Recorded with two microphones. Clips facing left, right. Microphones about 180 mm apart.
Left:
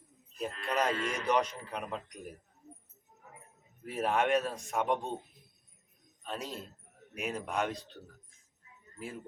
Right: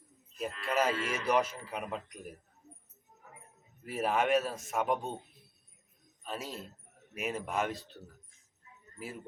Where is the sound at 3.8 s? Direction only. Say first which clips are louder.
Even; centre (ahead or behind).